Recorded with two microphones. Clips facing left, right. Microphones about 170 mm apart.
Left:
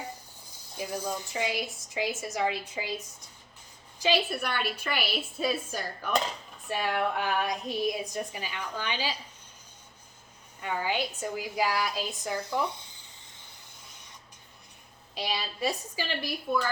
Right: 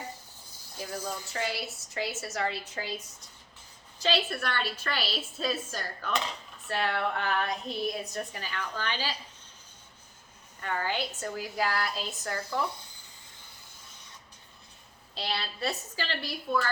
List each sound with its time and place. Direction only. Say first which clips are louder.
0.8 s a woman's voice: left 3 dB; 15° left (ahead or behind)
4.0 s a woman's voice: left 2 dB; 10° left (ahead or behind)
10.6 s a woman's voice: left 1 dB; 10° left (ahead or behind)
15.2 s a woman's voice: left 2 dB; 10° left (ahead or behind)